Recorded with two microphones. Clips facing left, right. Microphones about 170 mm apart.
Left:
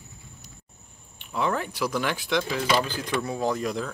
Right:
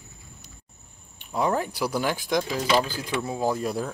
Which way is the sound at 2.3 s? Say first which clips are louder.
Even; 40° right (ahead or behind).